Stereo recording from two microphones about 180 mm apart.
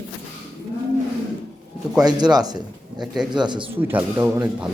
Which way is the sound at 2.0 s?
25° right (ahead or behind).